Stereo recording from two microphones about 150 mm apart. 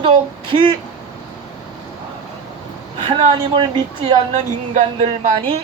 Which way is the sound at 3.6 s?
30° right (ahead or behind).